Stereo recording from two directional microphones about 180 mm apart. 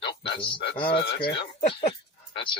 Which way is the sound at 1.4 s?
30° left (ahead or behind).